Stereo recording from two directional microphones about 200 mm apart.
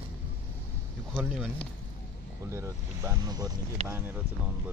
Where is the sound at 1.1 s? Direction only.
Centre (ahead or behind).